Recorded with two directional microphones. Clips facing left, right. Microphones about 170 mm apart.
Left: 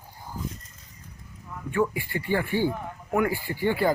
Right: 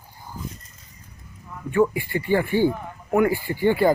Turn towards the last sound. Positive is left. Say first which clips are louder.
# right 5 dB
turn(degrees=-20)  # may be behind; listen again after turning